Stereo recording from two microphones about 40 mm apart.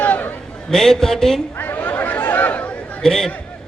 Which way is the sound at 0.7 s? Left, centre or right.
Centre.